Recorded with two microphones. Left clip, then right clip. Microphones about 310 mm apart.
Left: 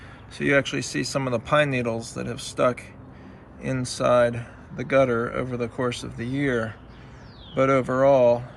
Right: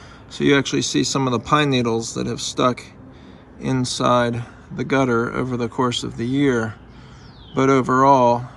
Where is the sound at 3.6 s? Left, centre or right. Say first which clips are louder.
Right 4 dB; centre.